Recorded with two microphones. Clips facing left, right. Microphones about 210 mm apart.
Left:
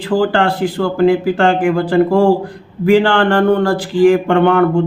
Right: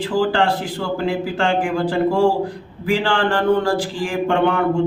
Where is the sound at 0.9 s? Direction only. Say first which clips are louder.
Left 10 dB; 60° left (ahead or behind).